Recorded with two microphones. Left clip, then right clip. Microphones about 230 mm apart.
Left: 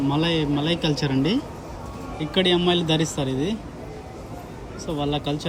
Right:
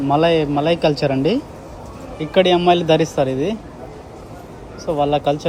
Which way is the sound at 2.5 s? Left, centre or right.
Right.